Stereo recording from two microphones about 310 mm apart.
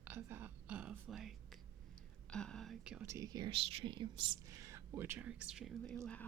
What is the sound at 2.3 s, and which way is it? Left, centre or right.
Speech, centre.